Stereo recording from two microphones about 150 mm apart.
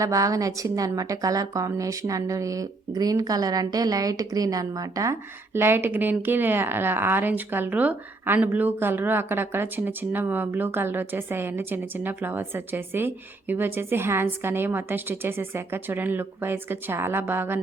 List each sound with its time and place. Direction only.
0.0 s a woman's voice: 20° right (ahead or behind)